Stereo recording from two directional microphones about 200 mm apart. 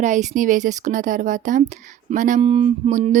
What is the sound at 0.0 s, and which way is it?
Speech, 35° right (ahead or behind).